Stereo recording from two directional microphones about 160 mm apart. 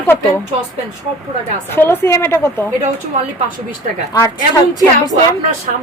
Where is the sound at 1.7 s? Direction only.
15° left (ahead or behind).